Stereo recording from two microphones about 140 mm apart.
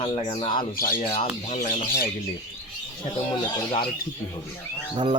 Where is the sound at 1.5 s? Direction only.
60° left (ahead or behind).